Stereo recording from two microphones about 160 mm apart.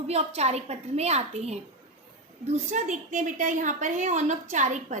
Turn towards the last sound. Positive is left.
turn(degrees=-50)  # may be behind; listen again after turning